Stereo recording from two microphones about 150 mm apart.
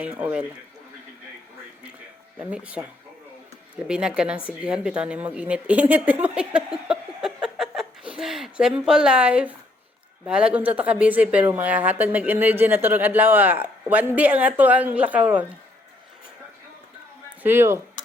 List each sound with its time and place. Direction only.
0.0 s a woman's voice: 10° right (ahead or behind)
2.4 s a woman's voice: 5° right (ahead or behind)
3.8 s a woman's voice: 5° right (ahead or behind)
6.2 s a sound: 10° right (ahead or behind)
10.2 s a woman's voice: 5° right (ahead or behind)
17.4 s a woman's voice: 15° right (ahead or behind)